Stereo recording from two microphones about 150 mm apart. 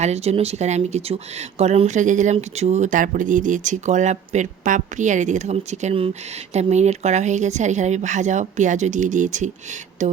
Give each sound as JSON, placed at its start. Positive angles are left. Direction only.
{"t": 0.0, "sound": "speech", "side_deg": -45}